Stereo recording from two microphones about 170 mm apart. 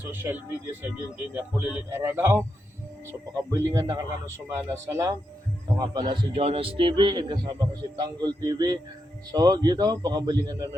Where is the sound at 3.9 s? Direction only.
15° right (ahead or behind).